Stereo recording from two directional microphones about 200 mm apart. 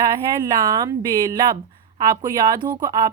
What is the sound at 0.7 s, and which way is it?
A woman's voice, 20° right (ahead or behind).